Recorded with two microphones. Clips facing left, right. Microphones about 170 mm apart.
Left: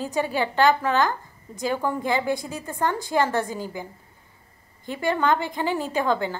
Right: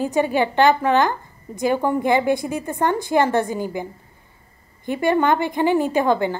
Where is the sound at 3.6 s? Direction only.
60° right (ahead or behind).